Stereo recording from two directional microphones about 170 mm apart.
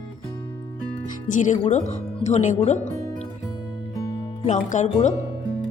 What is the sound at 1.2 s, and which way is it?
Speech, 50° left (ahead or behind).